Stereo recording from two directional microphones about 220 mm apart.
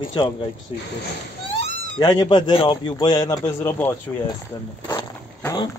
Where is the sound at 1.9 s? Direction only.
20° left (ahead or behind).